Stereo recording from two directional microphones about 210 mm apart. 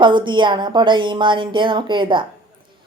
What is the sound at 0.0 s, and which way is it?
Speech, 20° right (ahead or behind).